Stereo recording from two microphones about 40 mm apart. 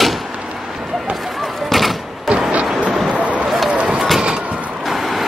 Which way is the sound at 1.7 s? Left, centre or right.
Centre.